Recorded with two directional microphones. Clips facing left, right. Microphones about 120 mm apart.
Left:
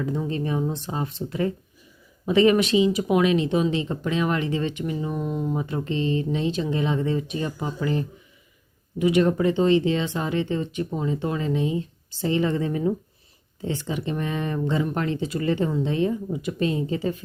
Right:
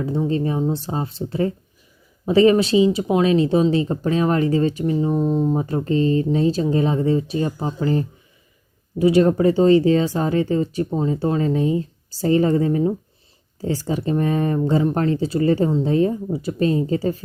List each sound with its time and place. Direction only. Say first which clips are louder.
0.3 s speech: right 5 dB; 30° right (ahead or behind)